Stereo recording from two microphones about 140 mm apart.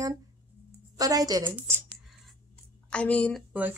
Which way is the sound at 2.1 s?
Centre (ahead or behind).